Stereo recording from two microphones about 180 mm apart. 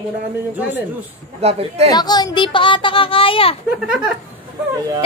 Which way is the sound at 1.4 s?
35° right (ahead or behind).